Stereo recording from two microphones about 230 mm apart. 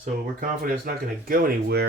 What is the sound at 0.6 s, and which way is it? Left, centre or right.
Speech, right.